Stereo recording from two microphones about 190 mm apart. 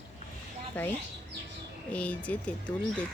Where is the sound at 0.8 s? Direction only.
10° left (ahead or behind).